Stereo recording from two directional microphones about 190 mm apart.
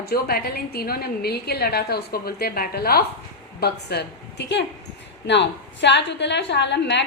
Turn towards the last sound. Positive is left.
turn(degrees=65)  # may be behind; listen again after turning